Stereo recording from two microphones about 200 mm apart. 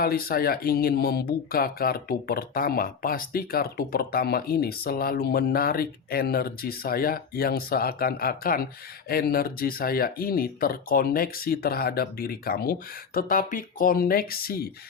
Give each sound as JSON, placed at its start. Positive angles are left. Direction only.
{"t": 0.0, "sound": "speech", "side_deg": 50}